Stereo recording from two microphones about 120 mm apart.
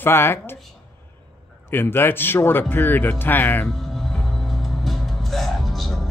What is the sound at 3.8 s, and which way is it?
Music, centre (ahead or behind).